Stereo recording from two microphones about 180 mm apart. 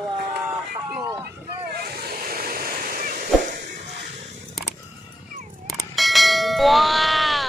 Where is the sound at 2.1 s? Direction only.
55° right (ahead or behind).